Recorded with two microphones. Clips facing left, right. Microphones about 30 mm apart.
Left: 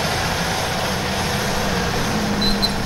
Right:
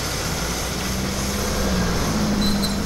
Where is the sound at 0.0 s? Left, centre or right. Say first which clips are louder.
Left 5 dB; left.